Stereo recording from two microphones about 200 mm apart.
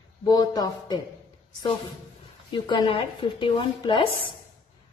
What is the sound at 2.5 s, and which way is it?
A woman's voice, 20° left (ahead or behind).